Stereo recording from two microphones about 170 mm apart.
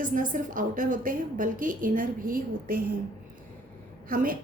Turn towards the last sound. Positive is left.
turn(degrees=-55)  # may be behind; listen again after turning